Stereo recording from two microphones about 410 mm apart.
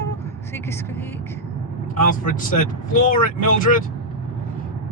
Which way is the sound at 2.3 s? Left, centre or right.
Centre.